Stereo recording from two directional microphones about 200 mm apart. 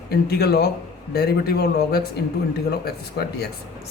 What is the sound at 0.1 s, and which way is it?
Speech, 50° left (ahead or behind).